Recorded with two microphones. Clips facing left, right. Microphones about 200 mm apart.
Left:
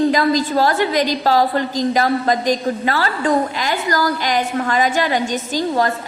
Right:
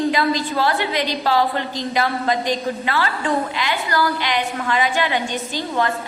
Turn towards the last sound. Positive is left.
turn(degrees=40)  # may be behind; listen again after turning